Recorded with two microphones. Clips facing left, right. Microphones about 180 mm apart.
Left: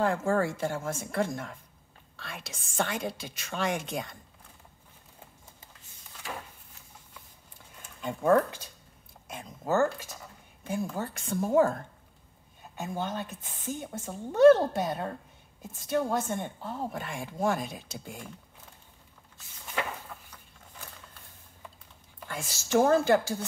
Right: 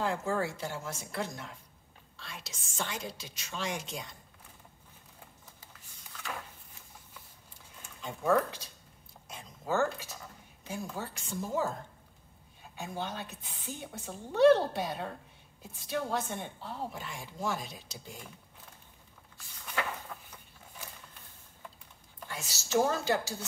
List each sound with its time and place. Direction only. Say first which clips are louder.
0.0 s a woman's voice: left 5 dB; 50° left (ahead or behind)
8.0 s a woman's voice: left 5 dB; 50° left (ahead or behind)
9.3 s a sound: left 4 dB; 50° left (ahead or behind)
10.6 s a woman's voice: left 6 dB; 55° left (ahead or behind)
12.8 s a woman's voice: left 5 dB; 50° left (ahead or behind)
22.3 s a woman's voice: left 4 dB; 50° left (ahead or behind)